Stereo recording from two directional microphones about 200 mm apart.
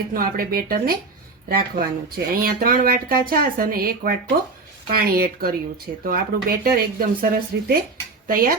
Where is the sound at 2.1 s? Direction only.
45° right (ahead or behind).